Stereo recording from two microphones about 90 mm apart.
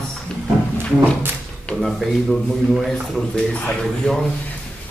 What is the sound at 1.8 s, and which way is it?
Speech, centre (ahead or behind).